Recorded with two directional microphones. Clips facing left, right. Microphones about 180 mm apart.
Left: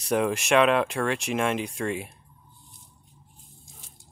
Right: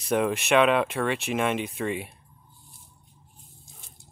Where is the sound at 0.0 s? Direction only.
Centre (ahead or behind).